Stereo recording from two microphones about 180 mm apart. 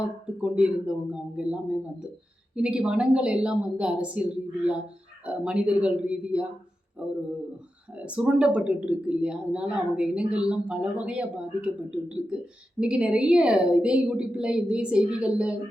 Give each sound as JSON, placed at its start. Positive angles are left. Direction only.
{"t": 0.4, "sound": "a woman's voice", "side_deg": -5}
{"t": 2.6, "sound": "a woman's voice", "side_deg": -5}